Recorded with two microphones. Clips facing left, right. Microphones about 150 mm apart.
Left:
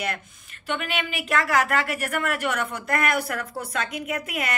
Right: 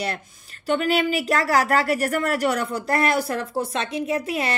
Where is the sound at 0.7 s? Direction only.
35° right (ahead or behind).